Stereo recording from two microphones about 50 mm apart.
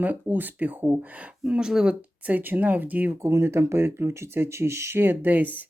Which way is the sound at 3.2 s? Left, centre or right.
Right.